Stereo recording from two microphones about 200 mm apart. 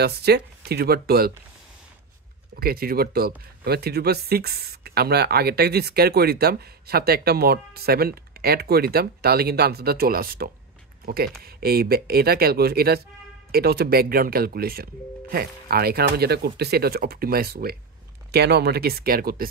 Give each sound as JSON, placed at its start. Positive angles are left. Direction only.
{"t": 0.0, "sound": "speech", "side_deg": -55}
{"t": 2.5, "sound": "speech", "side_deg": -50}